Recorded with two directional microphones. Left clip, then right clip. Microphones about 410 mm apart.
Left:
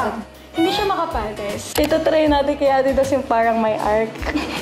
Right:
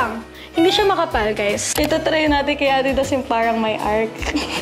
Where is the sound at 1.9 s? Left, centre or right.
Centre.